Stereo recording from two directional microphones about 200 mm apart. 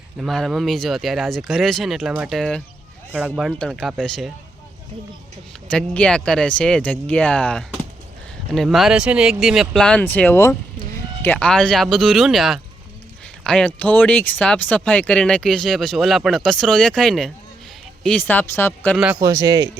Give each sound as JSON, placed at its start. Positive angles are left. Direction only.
{"t": 0.2, "sound": "speech", "side_deg": 0}
{"t": 5.6, "sound": "speech", "side_deg": 5}
{"t": 19.2, "sound": "speech", "side_deg": -15}